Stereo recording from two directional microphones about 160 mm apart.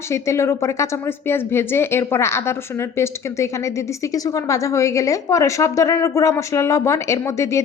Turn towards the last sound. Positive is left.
turn(degrees=15)  # may be behind; listen again after turning